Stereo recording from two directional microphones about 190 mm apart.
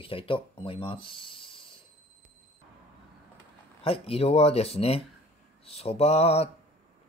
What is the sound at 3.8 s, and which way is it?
A man's voice, 30° left (ahead or behind).